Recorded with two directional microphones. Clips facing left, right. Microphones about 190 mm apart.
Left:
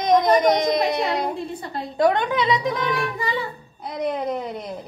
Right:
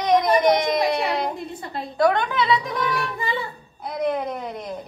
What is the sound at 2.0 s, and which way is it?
Speech, 20° left (ahead or behind).